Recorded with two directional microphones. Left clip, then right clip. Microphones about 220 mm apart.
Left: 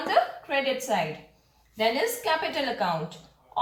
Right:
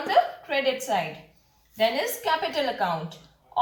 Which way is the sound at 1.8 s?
15° right (ahead or behind).